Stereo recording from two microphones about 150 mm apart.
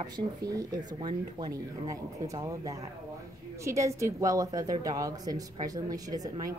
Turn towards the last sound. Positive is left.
turn(degrees=-25)  # may be behind; listen again after turning